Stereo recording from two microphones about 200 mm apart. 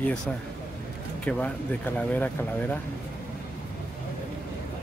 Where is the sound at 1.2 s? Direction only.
5° left (ahead or behind).